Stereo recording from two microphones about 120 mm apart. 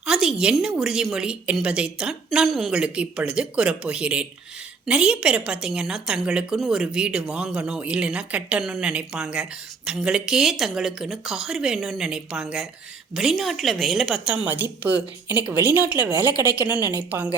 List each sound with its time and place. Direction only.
0.0 s a woman's voice: 5° right (ahead or behind)
14.4 s a woman's voice: 15° right (ahead or behind)